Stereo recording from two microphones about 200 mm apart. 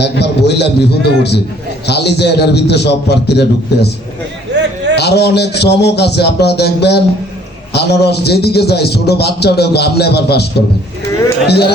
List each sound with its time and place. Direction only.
0.0 s a man's voice: 55° left (ahead or behind)
4.5 s a sound: 60° right (ahead or behind)
4.9 s a man's voice: 55° left (ahead or behind)
11.4 s a man's voice: 55° left (ahead or behind)